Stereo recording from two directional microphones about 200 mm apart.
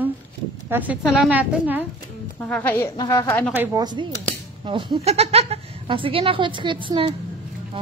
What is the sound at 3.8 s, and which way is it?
A woman's voice, 20° right (ahead or behind).